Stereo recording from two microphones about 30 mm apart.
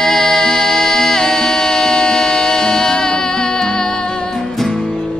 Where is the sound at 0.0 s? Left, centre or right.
Left.